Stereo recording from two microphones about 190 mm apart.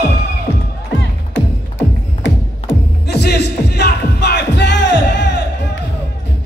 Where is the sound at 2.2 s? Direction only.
65° left (ahead or behind).